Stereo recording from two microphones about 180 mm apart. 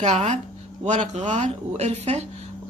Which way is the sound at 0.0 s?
40° right (ahead or behind).